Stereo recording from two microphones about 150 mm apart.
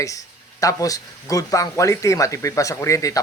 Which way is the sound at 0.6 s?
20° left (ahead or behind).